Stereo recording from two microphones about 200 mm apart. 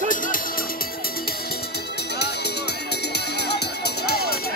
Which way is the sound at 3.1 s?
55° left (ahead or behind).